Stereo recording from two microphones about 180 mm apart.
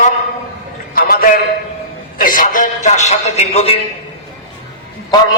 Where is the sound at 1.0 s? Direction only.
55° left (ahead or behind).